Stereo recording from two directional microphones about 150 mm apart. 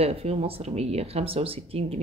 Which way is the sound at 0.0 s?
40° right (ahead or behind).